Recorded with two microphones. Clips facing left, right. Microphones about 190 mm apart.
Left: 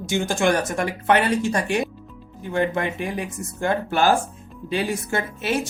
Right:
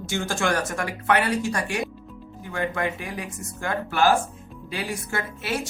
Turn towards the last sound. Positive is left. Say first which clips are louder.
# left 5 dB
turn(degrees=20)  # may be behind; listen again after turning